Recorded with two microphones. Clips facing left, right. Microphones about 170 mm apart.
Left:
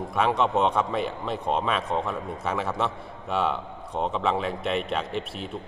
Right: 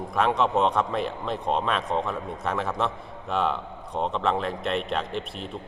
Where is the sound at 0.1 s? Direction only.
Centre (ahead or behind).